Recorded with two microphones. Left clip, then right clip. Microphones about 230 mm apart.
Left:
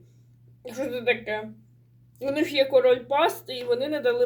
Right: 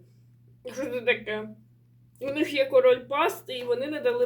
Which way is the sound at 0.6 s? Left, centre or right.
Centre.